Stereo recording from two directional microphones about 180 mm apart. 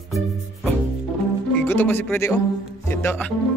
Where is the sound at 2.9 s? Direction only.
10° left (ahead or behind).